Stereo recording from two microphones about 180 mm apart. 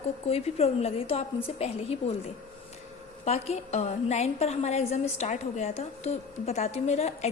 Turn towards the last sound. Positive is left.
turn(degrees=40)  # may be behind; listen again after turning